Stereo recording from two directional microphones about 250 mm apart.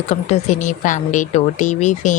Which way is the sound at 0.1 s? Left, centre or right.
Left.